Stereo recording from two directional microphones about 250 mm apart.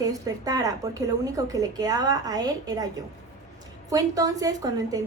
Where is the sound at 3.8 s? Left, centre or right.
Centre.